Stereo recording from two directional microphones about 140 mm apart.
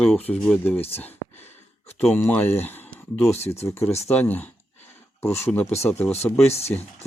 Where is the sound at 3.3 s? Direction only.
50° left (ahead or behind).